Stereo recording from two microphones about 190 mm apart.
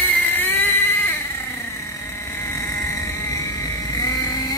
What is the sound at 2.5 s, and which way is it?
Vehicle, 15° left (ahead or behind).